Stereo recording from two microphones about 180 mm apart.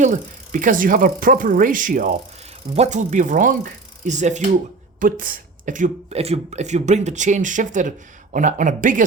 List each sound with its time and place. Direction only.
0.0 s speech: 45° right (ahead or behind)